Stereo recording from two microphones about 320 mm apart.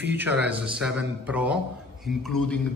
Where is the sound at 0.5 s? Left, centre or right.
Centre.